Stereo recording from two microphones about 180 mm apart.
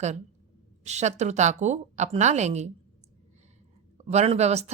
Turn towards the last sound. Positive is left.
turn(degrees=-35)  # may be behind; listen again after turning